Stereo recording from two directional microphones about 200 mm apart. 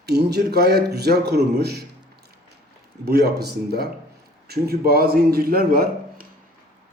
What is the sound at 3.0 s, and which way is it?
A man's voice, 55° right (ahead or behind).